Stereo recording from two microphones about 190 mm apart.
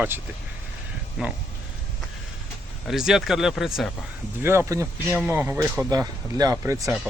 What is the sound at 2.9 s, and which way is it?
Speech, centre (ahead or behind).